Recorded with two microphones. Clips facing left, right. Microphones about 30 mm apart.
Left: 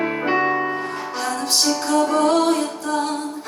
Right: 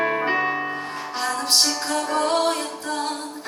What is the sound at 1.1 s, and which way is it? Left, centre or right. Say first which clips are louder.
Music: right 1 dB; centre.